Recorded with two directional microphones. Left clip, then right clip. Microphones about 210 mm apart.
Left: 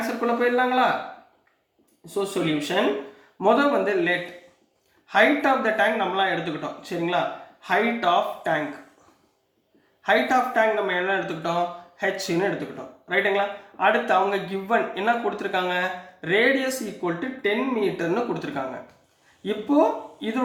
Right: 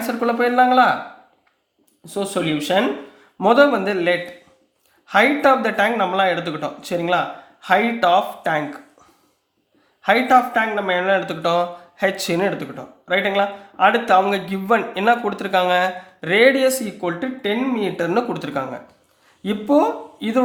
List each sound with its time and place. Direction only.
0.3 s speech: 50° right (ahead or behind)
2.0 s speech: 50° right (ahead or behind)
10.0 s speech: 50° right (ahead or behind)